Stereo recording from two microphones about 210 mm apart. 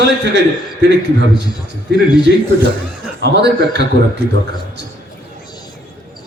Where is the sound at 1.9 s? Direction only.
55° right (ahead or behind).